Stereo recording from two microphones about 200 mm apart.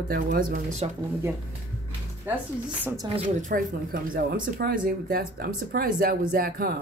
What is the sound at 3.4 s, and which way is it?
Speech, 40° right (ahead or behind).